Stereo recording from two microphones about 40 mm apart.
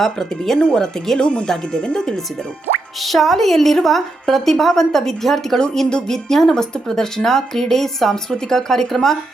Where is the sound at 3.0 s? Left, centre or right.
Centre.